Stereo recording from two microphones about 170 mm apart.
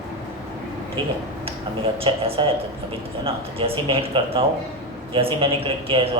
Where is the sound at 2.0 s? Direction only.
35° right (ahead or behind).